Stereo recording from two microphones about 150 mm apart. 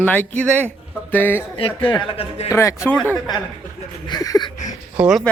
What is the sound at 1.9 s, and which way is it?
Speech, 40° left (ahead or behind).